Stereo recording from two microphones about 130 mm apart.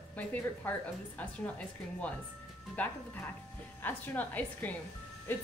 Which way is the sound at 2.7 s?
10° left (ahead or behind).